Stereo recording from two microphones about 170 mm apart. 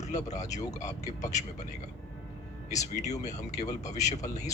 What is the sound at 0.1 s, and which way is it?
Speech, 40° left (ahead or behind).